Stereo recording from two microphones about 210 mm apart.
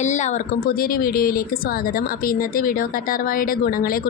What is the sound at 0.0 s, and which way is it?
A woman's voice, 35° left (ahead or behind).